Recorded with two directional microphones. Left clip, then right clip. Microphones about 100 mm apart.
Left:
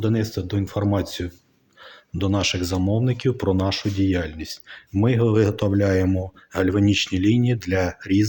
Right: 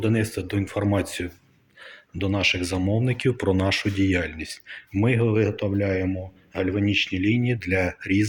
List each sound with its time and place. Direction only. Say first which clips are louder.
0.0 s speech: even; centre (ahead or behind)
2.1 s speech: even; 30° left (ahead or behind); by 4.2 s 5° left (ahead or behind)
4.2 s speech: even; 25° left (ahead or behind)
5.3 s speech: left 3 dB; 40° left (ahead or behind)
5.5 s speech: left 4 dB; 55° left (ahead or behind); by 8.3 s 30° left (ahead or behind)